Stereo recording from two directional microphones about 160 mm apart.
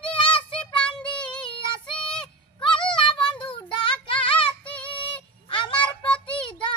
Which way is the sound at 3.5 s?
35° left (ahead or behind).